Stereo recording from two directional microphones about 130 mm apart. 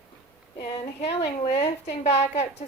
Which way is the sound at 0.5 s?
50° left (ahead or behind).